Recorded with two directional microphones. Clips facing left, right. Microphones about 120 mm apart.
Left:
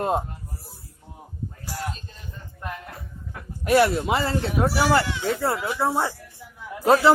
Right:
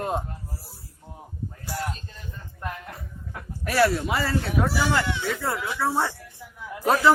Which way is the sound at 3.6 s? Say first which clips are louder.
Left 3 dB; 20° left (ahead or behind).